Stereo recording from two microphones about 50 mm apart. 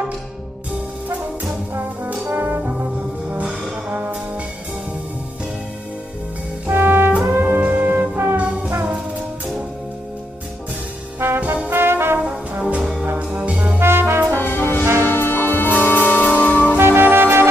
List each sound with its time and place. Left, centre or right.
2.3 s music: right
6.7 s music: right
11.1 s trombone: right
11.7 s brass instrument: right
12.5 s brass instrument: right
13.7 s brass instrument: right
14.4 s brass instrument: left
15.0 s music: left
16.7 s music: right